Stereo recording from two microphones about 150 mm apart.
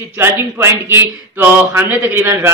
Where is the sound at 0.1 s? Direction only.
15° right (ahead or behind).